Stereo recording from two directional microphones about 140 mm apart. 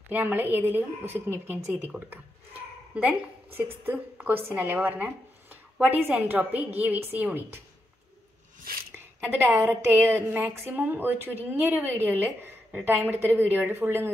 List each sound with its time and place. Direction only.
0.1 s a woman's voice: 15° right (ahead or behind)
2.9 s a woman's voice: 10° right (ahead or behind)
8.9 s a woman's voice: 15° right (ahead or behind)